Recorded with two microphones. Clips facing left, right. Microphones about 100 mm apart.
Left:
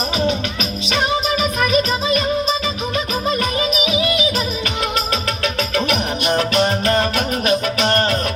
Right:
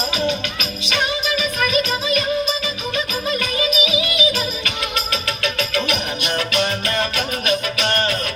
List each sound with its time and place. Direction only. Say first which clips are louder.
1.3 s music: left 3 dB; 35° left (ahead or behind)
5.4 s music: even; 40° left (ahead or behind)